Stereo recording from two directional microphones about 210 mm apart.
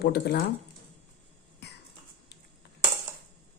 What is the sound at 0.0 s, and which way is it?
Speech, 50° left (ahead or behind).